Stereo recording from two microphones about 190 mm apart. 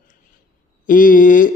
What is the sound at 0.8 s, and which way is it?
Speech, 45° left (ahead or behind).